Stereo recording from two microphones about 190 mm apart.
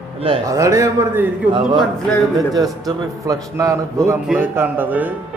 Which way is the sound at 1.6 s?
Centre (ahead or behind).